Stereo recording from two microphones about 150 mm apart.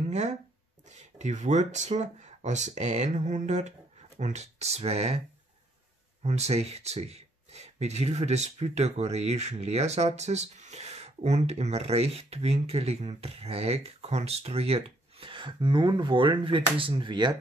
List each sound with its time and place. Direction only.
0.1 s speech: 50° right (ahead or behind)
6.2 s speech: 45° right (ahead or behind); by 17.4 s 30° right (ahead or behind)